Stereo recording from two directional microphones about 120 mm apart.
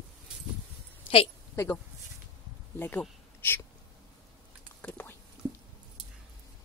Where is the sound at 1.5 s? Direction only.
15° left (ahead or behind).